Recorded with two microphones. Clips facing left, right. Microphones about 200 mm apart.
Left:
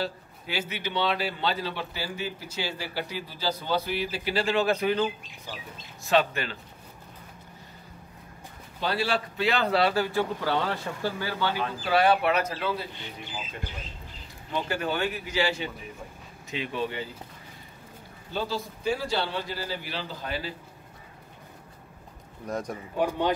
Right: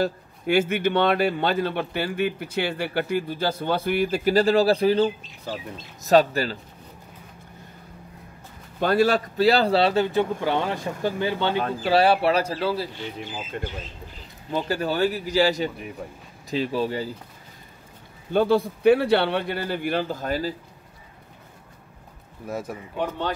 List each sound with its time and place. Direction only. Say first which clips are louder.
0.0 s a man's voice: right 8 dB; 50° right (ahead or behind)
8.7 s a man's voice: right 8 dB; 50° right (ahead or behind); by 12.8 s 30° right (ahead or behind)
14.5 s speech: right 4 dB; 35° right (ahead or behind)
18.3 s a man's voice: right 11 dB; 55° right (ahead or behind)
22.5 s speech: right 1 dB; 5° right (ahead or behind)
22.9 s speech: left 2 dB; 10° left (ahead or behind)